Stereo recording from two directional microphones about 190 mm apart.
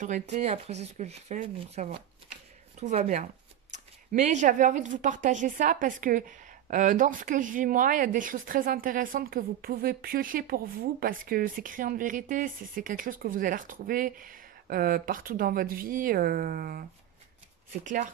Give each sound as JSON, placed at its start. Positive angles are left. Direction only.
{"t": 0.0, "sound": "speech", "side_deg": -40}
{"t": 17.8, "sound": "speech", "side_deg": -40}